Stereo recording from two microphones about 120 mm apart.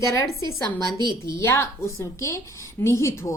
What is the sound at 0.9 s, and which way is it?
Speech, 40° right (ahead or behind).